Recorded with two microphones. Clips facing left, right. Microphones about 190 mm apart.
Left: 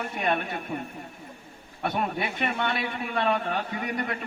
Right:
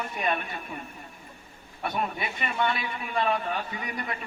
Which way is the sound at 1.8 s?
65° left (ahead or behind).